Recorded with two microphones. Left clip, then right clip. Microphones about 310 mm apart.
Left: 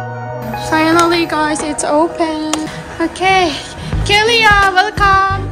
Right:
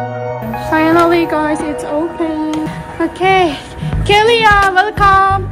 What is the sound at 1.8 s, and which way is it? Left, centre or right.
Speech, centre.